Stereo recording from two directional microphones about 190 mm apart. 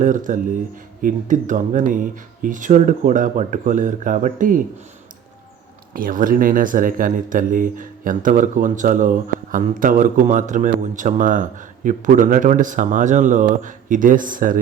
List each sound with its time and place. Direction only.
0.0 s speech: 45° right (ahead or behind)
5.9 s speech: 45° right (ahead or behind)